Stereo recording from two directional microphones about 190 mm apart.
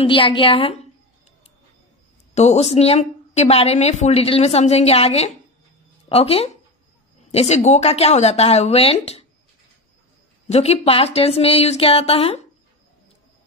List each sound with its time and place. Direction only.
0.0 s a woman's voice: 25° left (ahead or behind)
2.3 s a woman's voice: 35° left (ahead or behind)
10.5 s a woman's voice: 35° left (ahead or behind)